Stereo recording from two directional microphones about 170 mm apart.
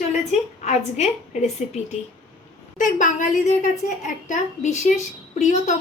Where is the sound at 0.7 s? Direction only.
40° left (ahead or behind).